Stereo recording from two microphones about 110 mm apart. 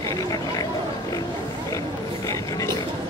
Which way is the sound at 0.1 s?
35° left (ahead or behind).